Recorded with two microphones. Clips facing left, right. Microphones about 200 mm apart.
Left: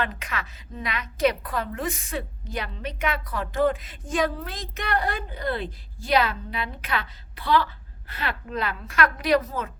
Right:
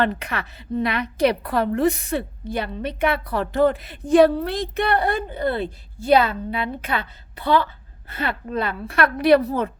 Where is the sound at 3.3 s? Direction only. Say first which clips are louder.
Right 3 dB; 65° right (ahead or behind).